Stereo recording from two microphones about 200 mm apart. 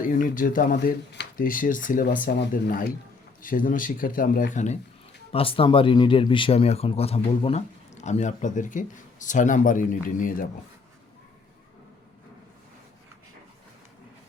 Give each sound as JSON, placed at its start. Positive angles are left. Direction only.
{"t": 0.0, "sound": "speech", "side_deg": 45}